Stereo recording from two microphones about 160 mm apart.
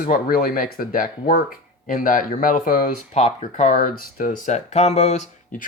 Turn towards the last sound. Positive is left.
turn(degrees=45)  # may be behind; listen again after turning